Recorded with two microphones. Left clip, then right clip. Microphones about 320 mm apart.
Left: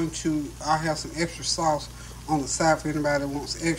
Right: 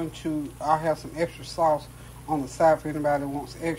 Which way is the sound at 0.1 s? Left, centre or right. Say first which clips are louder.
Left 3 dB; centre.